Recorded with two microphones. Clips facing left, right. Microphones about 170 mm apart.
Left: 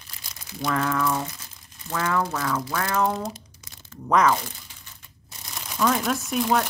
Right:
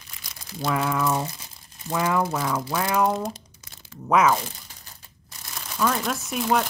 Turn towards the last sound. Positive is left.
turn(degrees=0)  # may be behind; listen again after turning